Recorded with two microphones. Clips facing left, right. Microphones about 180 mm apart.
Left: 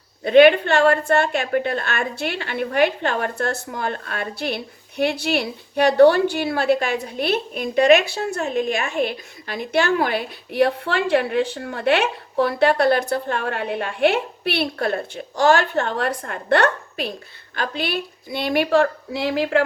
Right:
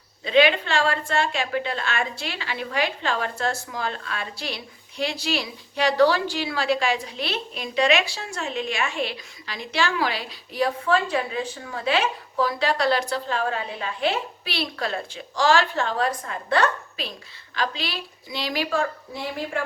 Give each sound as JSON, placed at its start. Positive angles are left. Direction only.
{"t": 0.3, "sound": "a woman's voice", "side_deg": 55}